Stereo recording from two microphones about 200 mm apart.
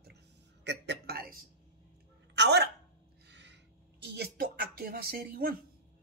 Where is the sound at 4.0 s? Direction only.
55° right (ahead or behind).